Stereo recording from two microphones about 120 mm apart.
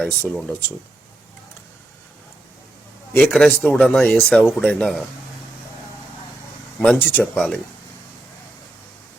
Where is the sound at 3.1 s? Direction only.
5° left (ahead or behind).